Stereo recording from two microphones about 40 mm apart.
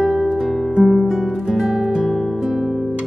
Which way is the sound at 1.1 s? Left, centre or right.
Centre.